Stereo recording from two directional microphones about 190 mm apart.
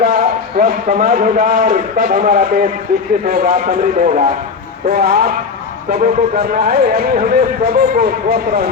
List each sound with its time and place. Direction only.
0.0 s a man's voice: 50° right (ahead or behind)
4.9 s speech: 55° right (ahead or behind)
6.4 s speech: 55° right (ahead or behind)